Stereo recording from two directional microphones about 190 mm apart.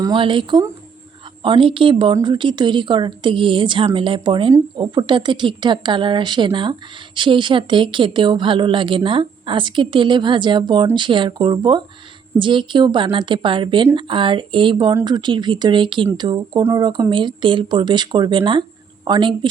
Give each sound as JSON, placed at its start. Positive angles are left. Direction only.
{"t": 0.0, "sound": "speech", "side_deg": -25}